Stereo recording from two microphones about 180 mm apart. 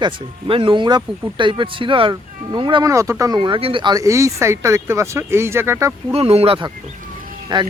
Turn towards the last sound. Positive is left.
turn(degrees=-25)  # may be behind; listen again after turning